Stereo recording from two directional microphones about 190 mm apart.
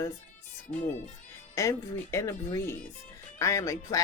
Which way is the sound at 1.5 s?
15° left (ahead or behind).